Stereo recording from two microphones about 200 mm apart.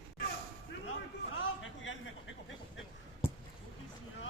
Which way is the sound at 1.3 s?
80° left.